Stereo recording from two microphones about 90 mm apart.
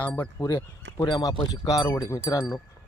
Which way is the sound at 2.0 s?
30° left (ahead or behind).